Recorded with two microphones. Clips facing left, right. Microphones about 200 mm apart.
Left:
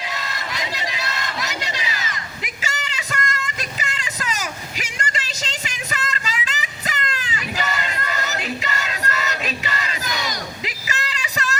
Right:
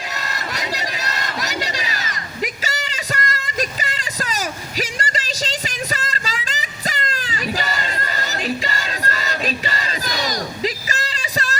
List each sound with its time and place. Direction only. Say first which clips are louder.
0.1 s crowd: right 1 dB; 45° right (ahead or behind)